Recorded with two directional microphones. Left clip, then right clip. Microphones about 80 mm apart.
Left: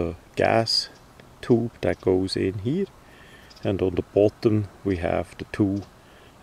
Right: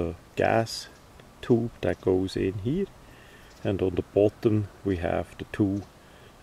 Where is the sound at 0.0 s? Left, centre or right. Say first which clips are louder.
Left 3 dB; left.